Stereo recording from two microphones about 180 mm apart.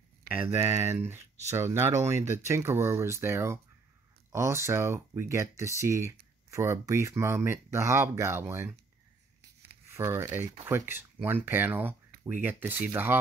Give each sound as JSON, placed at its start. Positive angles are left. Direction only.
{"t": 0.3, "sound": "speech", "side_deg": -10}
{"t": 9.9, "sound": "speech", "side_deg": -15}